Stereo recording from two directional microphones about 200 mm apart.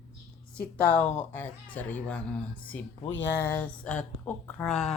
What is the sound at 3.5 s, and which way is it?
Speech, 5° left (ahead or behind).